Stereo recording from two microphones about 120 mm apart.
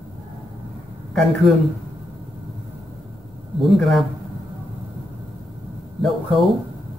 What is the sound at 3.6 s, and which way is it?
Speech, centre (ahead or behind).